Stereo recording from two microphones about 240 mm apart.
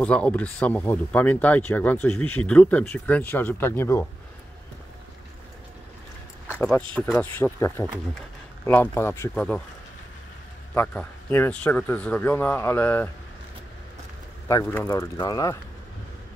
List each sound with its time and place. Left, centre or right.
0.0 s speech: centre
6.4 s speech: centre
10.7 s speech: centre
14.5 s speech: centre